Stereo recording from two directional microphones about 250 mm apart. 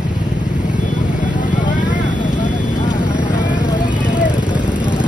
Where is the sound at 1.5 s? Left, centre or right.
Left.